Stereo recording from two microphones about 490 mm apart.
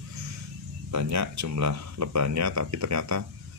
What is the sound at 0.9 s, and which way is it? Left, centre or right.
Speech, right.